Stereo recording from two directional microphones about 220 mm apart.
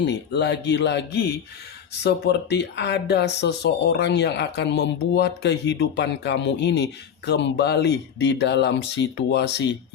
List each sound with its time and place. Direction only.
0.0 s speech: 50° left (ahead or behind)